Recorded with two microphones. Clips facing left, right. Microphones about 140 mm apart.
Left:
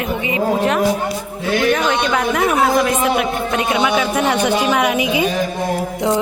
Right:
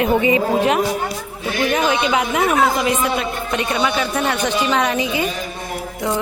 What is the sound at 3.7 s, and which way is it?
Speech, 5° left (ahead or behind).